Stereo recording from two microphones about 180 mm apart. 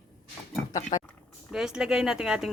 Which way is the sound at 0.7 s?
45° left (ahead or behind).